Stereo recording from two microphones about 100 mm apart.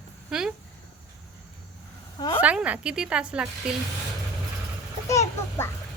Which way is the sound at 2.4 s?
15° right (ahead or behind).